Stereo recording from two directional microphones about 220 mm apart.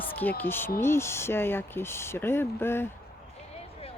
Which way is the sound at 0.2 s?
10° left (ahead or behind).